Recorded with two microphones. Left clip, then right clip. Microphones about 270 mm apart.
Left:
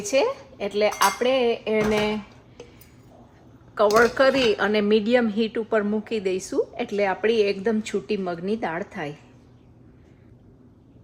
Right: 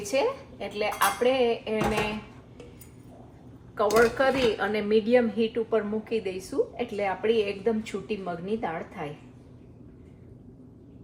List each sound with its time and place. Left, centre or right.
0.0 s speech: left
3.9 s speech: left